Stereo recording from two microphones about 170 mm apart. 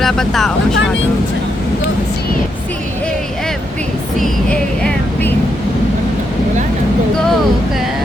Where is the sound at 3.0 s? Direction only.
5° left (ahead or behind).